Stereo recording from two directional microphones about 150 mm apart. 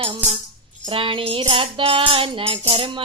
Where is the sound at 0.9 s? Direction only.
35° right (ahead or behind).